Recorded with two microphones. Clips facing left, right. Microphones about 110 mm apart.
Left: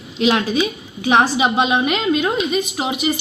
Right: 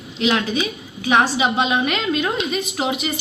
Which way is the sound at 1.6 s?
10° left (ahead or behind).